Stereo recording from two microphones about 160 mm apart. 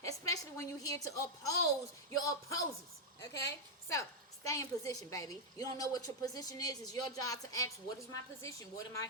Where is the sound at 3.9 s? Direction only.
20° left (ahead or behind).